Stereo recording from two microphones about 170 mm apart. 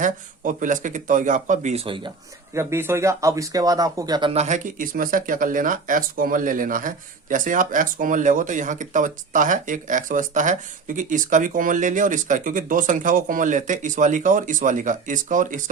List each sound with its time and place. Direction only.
0.0 s speech: 50° right (ahead or behind); by 2.1 s 35° right (ahead or behind)
2.6 s speech: 15° right (ahead or behind)
4.4 s speech: 45° right (ahead or behind)